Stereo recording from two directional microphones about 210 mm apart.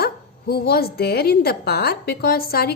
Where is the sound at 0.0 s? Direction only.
50° left (ahead or behind).